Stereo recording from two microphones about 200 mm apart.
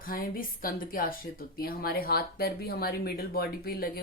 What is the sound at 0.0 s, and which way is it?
A woman's voice, 45° left (ahead or behind).